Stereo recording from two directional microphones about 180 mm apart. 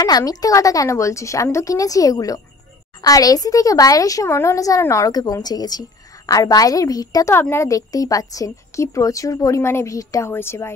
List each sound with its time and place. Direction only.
0.0 s speech: 20° left (ahead or behind)